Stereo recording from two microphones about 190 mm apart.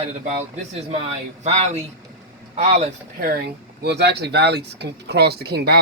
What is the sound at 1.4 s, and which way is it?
Speech, 35° right (ahead or behind).